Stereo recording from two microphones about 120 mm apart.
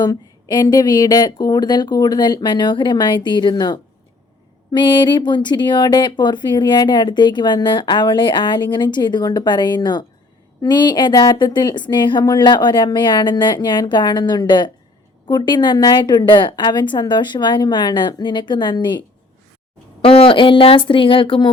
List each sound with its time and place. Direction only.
0.0 s speech: 35° left (ahead or behind)
20.0 s speech: 50° left (ahead or behind)